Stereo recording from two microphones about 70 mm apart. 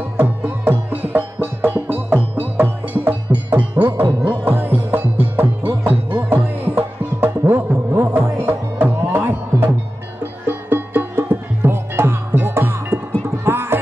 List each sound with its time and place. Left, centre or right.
0.2 s music: right